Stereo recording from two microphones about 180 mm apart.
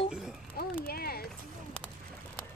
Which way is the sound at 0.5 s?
55° left (ahead or behind).